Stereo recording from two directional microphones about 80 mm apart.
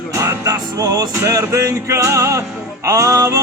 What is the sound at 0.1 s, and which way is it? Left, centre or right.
Music, right.